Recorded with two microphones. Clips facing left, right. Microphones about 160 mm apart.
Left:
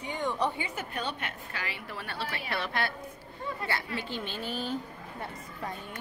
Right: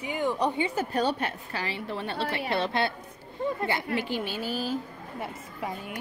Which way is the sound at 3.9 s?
10° right (ahead or behind).